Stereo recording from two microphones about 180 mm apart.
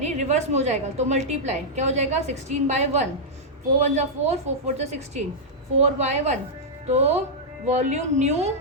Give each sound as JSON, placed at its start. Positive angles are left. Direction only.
{"t": 0.0, "sound": "a woman's voice", "side_deg": -40}